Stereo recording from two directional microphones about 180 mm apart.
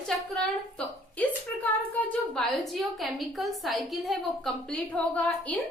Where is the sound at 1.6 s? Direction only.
5° left (ahead or behind).